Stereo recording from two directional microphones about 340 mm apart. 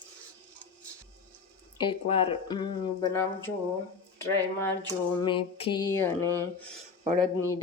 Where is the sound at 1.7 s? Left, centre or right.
Centre.